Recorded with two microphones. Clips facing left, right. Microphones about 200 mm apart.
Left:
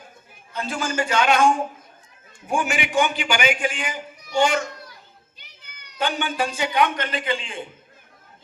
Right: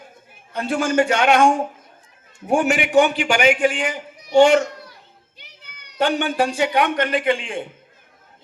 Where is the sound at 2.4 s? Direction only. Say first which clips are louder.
Right 6 dB; 65° right (ahead or behind).